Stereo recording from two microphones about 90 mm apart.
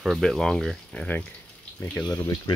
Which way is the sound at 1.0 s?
20° left (ahead or behind).